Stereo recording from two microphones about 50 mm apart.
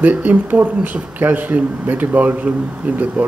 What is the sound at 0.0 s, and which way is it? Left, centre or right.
A man's voice, right.